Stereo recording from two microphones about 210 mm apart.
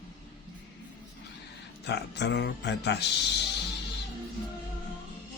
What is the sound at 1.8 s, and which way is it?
Speech, 55° left (ahead or behind).